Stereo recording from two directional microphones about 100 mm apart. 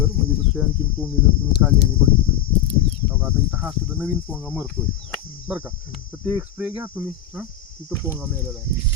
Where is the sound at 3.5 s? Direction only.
10° left (ahead or behind).